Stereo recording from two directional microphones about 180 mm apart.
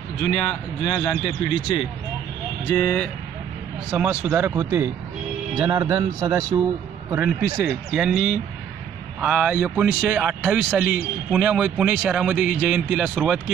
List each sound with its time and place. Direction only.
0.2 s a man's voice: 25° left (ahead or behind)
2.6 s speech: 10° left (ahead or behind)
3.9 s speech: 10° right (ahead or behind); by 6.6 s 25° right (ahead or behind)
7.2 s speech: 10° right (ahead or behind)